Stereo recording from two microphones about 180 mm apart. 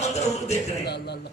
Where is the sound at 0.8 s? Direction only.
65° left (ahead or behind).